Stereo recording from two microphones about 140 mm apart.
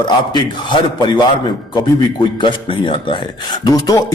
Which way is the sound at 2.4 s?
35° left (ahead or behind).